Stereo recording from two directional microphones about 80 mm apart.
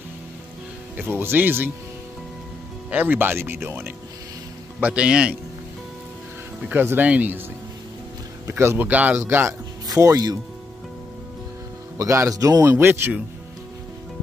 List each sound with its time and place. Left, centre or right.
0.9 s speech: right
2.9 s speech: right
4.7 s a man's voice: centre
6.7 s speech: right
8.5 s a man's voice: right
8.8 s speech: right
9.8 s speech: right
12.0 s speech: right
12.6 s speech: right